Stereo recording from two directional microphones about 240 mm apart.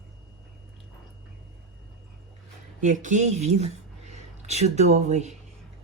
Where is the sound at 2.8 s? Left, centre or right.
Right.